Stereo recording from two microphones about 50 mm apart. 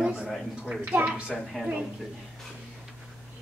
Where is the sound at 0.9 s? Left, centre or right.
Right.